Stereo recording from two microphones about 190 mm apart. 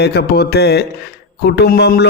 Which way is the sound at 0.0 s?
60° left (ahead or behind).